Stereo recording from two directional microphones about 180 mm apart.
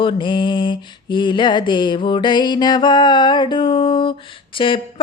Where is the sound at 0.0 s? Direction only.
25° left (ahead or behind).